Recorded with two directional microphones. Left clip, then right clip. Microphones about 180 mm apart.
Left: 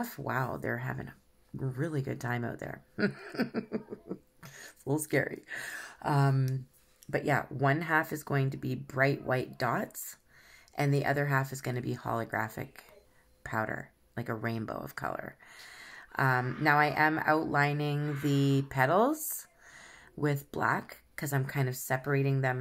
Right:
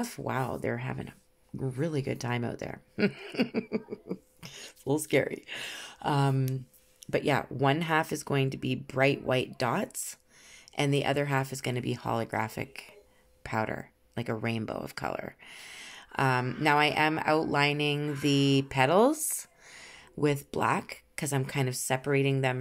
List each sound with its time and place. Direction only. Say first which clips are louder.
0.0 s speech: right 1 dB; 45° right (ahead or behind)
20.7 s speech: right 2 dB; 45° right (ahead or behind)